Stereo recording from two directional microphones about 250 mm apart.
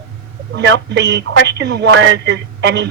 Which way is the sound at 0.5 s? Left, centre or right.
Right.